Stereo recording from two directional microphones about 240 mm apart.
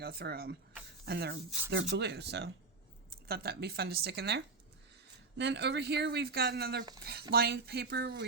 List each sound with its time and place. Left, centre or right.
0.0 s speech: right